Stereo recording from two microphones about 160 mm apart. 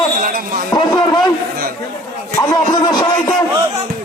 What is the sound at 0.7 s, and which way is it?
Speech, 25° left (ahead or behind).